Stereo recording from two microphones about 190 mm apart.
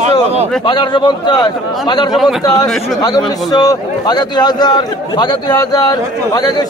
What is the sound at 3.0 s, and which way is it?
A man's voice, 20° left (ahead or behind).